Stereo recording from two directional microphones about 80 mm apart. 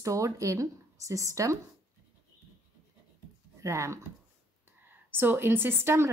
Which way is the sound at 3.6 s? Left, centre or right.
Right.